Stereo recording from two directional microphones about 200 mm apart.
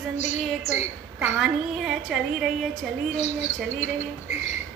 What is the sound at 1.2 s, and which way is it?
A woman's voice, centre (ahead or behind).